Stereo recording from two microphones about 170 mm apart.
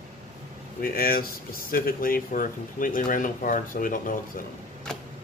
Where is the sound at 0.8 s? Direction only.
60° left (ahead or behind).